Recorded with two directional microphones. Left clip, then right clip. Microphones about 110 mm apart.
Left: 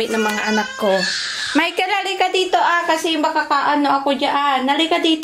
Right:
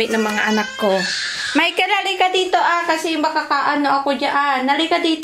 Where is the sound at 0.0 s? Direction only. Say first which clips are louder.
Right 1 dB; centre (ahead or behind).